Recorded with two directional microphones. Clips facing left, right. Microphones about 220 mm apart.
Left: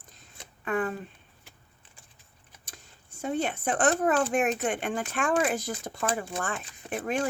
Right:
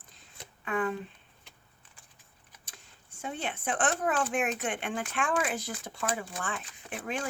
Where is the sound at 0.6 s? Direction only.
45° left (ahead or behind).